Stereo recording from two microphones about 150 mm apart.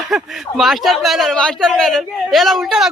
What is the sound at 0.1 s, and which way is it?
Speech, centre (ahead or behind).